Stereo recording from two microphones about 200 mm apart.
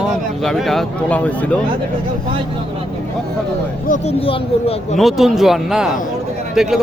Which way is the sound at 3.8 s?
35° left (ahead or behind).